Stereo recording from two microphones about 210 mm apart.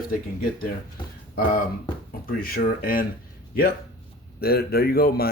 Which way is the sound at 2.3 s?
45° left (ahead or behind).